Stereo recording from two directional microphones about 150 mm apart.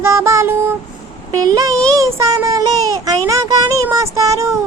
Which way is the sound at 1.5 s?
20° right (ahead or behind).